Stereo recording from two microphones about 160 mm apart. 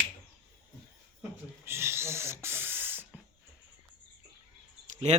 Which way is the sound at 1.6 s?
15° right (ahead or behind).